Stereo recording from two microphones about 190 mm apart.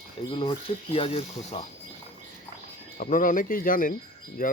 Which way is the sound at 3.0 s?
45° left (ahead or behind).